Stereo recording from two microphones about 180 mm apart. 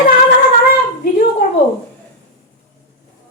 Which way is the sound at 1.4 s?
50° left (ahead or behind).